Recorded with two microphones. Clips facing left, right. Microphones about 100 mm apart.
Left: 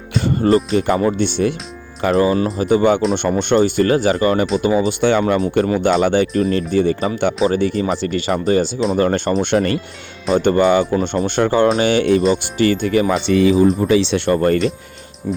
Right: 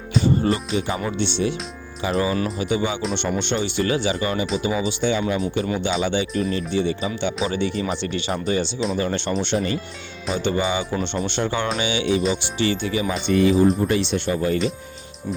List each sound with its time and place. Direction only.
0.4 s speech: 40° left (ahead or behind)
2.1 s speech: 35° left (ahead or behind); by 5.4 s 65° left (ahead or behind)
5.5 s speech: 50° left (ahead or behind)
9.6 s speech: 75° left (ahead or behind)
10.3 s speech: 50° left (ahead or behind)
10.9 s speech: 40° left (ahead or behind)
13.2 s speech: 90° left; by 14.6 s 60° left (ahead or behind)